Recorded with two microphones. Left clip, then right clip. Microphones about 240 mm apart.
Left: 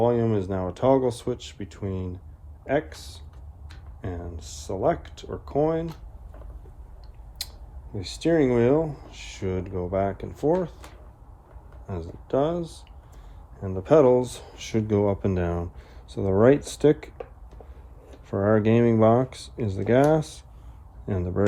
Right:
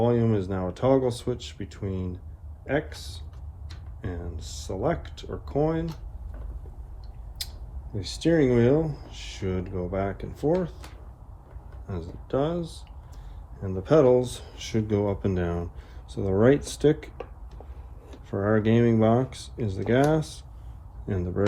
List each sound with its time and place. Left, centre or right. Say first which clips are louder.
0.0 s speech: left 2 dB; left
7.4 s a sound: left 1 dB; left
7.9 s speech: left 1 dB; left
11.9 s speech: left 2 dB; left
18.3 s speech: left 3 dB; left